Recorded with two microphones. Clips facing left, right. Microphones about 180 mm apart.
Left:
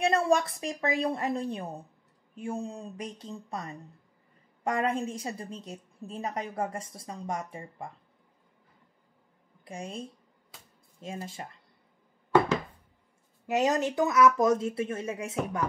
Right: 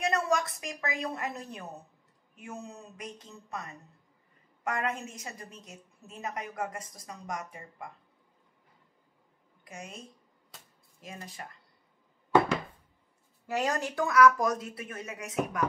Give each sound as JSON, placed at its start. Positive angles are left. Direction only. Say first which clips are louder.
{"t": 0.0, "sound": "a woman's voice", "louder": "left 4 dB", "side_deg": 30}
{"t": 9.7, "sound": "a woman's voice", "louder": "left 6 dB", "side_deg": 30}
{"t": 13.5, "sound": "speech", "louder": "left 5 dB", "side_deg": 20}